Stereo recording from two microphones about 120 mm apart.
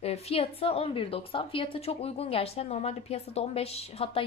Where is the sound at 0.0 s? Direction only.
55° left (ahead or behind).